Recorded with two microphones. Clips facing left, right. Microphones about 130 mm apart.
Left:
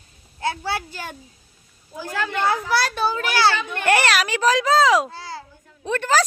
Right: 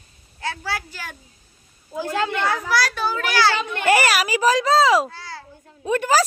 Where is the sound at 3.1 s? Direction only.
25° left (ahead or behind).